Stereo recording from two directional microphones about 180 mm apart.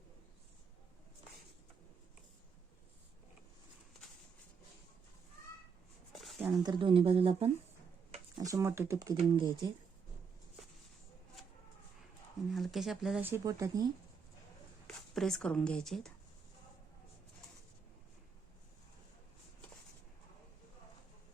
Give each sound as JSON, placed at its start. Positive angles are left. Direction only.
{"t": 6.1, "sound": "a sound", "side_deg": 0}
{"t": 6.6, "sound": "speech", "side_deg": -25}
{"t": 8.4, "sound": "speech", "side_deg": -20}
{"t": 12.5, "sound": "speech", "side_deg": 0}
{"t": 14.8, "sound": "speech", "side_deg": 5}